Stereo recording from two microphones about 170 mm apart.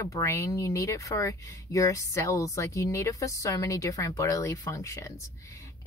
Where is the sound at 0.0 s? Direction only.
15° left (ahead or behind).